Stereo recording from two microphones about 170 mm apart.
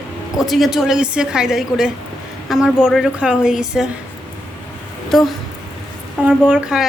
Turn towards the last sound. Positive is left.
turn(degrees=-5)  # may be behind; listen again after turning